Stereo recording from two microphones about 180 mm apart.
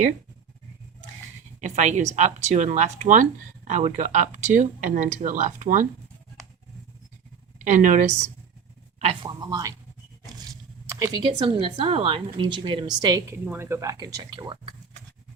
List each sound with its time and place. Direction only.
1.6 s speech: 40° right (ahead or behind)
7.6 s speech: 45° right (ahead or behind)
9.2 s speech: 20° right (ahead or behind)